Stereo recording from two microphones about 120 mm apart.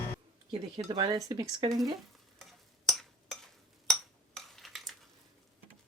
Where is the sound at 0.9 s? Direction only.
35° right (ahead or behind).